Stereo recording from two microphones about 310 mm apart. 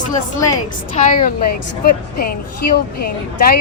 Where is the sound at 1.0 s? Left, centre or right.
Left.